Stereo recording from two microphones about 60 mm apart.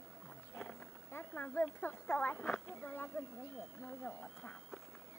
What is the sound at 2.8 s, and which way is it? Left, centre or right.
Speech, left.